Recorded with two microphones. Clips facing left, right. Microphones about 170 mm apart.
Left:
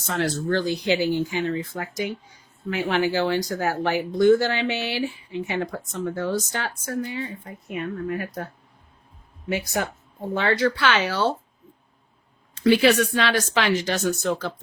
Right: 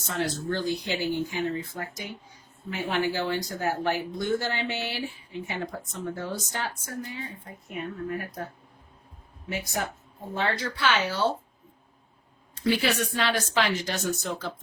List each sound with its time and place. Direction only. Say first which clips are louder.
0.1 s speech: left 5 dB; 90° left
10.3 s speech: left 7 dB; 85° left
12.5 s speech: left 8 dB; 85° left